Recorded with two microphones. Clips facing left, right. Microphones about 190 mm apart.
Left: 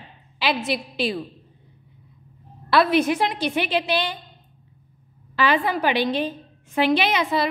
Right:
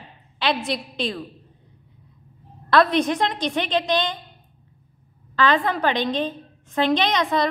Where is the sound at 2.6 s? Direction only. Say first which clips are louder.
Even; 5° left (ahead or behind).